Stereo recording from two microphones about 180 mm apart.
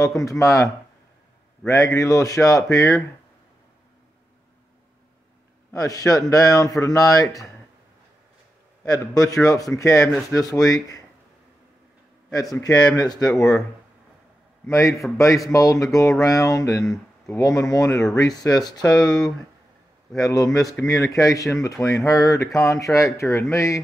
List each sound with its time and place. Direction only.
0.2 s speech: 20° left (ahead or behind)
1.7 s speech: 15° left (ahead or behind)
5.7 s a man's voice: 20° left (ahead or behind)
8.8 s a man's voice: 20° left (ahead or behind)
12.3 s a man's voice: 20° left (ahead or behind)
14.7 s speech: 15° left (ahead or behind)
16.8 s speech: centre (ahead or behind)
17.4 s a man's voice: 20° left (ahead or behind)
18.9 s speech: 5° left (ahead or behind)
20.2 s a man's voice: 20° left (ahead or behind)